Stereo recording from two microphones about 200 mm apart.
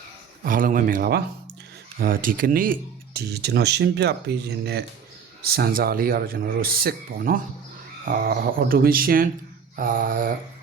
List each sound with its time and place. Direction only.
0.4 s speech: 45° right (ahead or behind)